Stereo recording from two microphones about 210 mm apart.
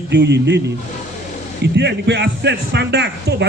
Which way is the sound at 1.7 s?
55° right (ahead or behind).